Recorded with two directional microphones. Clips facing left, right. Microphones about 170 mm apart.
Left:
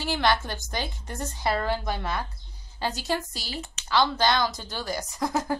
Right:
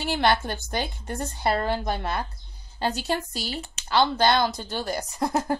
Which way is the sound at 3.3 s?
30° right (ahead or behind).